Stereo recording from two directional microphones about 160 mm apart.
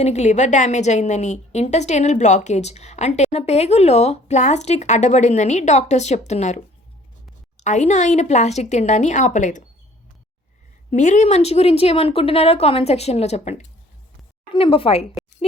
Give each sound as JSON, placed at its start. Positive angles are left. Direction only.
{"t": 0.0, "sound": "a woman's voice", "side_deg": 45}
{"t": 10.9, "sound": "speech", "side_deg": 50}